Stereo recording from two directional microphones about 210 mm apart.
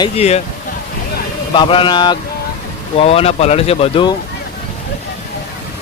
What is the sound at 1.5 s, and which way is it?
Speech, 25° left (ahead or behind).